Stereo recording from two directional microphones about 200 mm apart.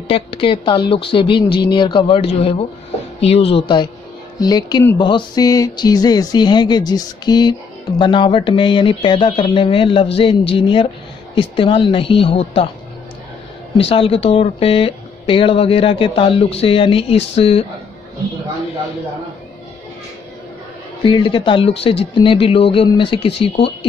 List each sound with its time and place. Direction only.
0.1 s speech: 25° left (ahead or behind)
13.7 s speech: 30° left (ahead or behind)
21.0 s speech: 25° left (ahead or behind)